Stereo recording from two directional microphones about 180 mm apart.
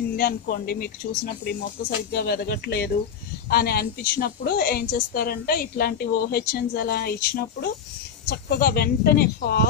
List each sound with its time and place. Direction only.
0.1 s a woman's voice: 55° left (ahead or behind)
8.3 s a woman's voice: 55° left (ahead or behind)